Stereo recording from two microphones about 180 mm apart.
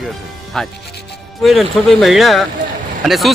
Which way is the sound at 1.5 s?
Centre (ahead or behind).